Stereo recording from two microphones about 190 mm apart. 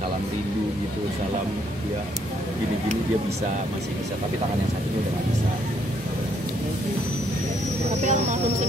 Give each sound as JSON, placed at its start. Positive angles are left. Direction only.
{"t": 8.0, "sound": "speech", "side_deg": -40}